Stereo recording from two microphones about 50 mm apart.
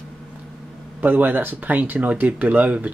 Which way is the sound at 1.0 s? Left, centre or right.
Right.